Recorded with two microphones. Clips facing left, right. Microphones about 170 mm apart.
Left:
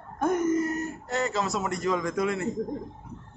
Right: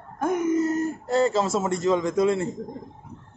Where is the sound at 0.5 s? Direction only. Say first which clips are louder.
Right 4 dB; 25° right (ahead or behind).